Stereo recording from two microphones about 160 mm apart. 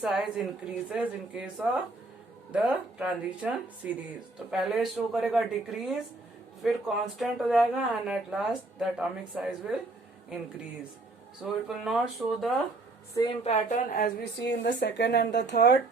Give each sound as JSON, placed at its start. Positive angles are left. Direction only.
{"t": 0.0, "sound": "speech", "side_deg": -5}
{"t": 11.4, "sound": "speech", "side_deg": -5}
{"t": 13.4, "sound": "speech", "side_deg": 45}